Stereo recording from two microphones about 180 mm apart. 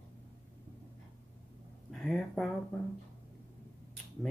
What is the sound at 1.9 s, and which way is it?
Speech, centre (ahead or behind).